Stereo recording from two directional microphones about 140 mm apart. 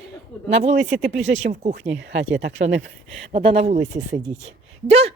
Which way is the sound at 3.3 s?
45° right (ahead or behind).